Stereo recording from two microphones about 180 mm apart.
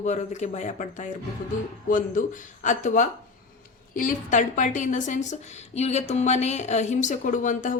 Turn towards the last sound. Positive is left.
turn(degrees=45)  # may be behind; listen again after turning